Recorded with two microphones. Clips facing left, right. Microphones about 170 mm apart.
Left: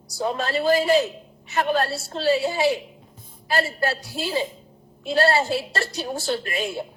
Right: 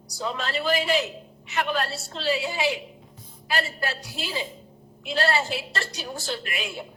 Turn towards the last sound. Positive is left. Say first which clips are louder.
# left 6 dB
turn(degrees=40)  # may be behind; listen again after turning